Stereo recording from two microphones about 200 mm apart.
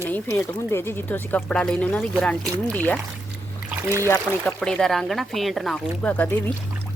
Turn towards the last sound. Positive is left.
turn(degrees=10)  # may be behind; listen again after turning